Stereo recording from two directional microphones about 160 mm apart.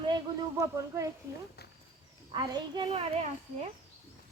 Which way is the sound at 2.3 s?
25° right (ahead or behind).